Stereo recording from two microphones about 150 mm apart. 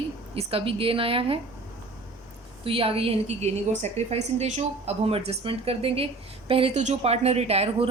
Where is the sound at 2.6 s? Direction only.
40° right (ahead or behind).